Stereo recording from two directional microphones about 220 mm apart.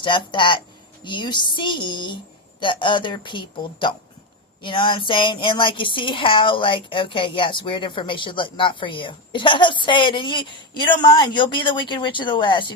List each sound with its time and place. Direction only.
0.0 s speech: 20° left (ahead or behind)